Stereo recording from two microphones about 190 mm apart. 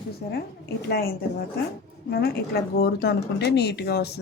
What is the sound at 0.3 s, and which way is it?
Speech, 55° left (ahead or behind).